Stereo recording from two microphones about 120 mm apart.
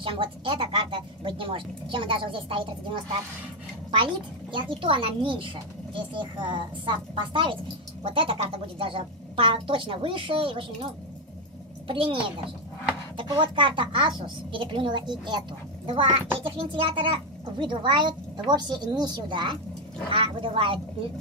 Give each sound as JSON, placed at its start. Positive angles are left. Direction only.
{"t": 0.0, "sound": "a child's voice", "side_deg": -45}
{"t": 11.9, "sound": "a child's voice", "side_deg": -50}